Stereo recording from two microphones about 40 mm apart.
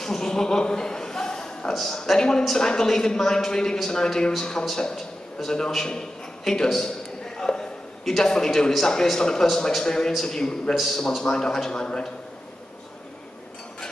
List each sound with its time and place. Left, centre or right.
0.0 s a man's voice: centre
7.3 s a sound: centre
8.0 s a man's voice: centre
10.7 s a man's voice: centre
11.0 s a man's voice: centre